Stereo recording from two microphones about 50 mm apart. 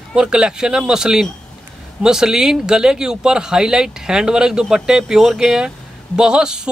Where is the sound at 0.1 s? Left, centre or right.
Centre.